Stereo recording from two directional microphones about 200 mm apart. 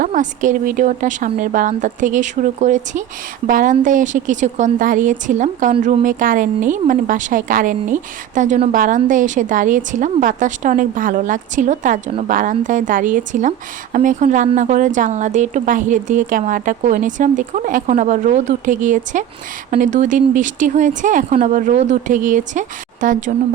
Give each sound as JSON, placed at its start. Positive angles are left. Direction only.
{"t": 0.0, "sound": "a woman's voice", "side_deg": -40}